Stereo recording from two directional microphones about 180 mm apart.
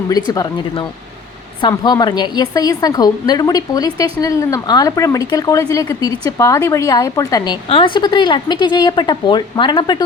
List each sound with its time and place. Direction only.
0.3 s a woman's voice: 25° left (ahead or behind)